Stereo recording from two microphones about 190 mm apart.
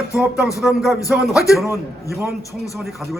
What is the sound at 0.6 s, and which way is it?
Speech, centre (ahead or behind).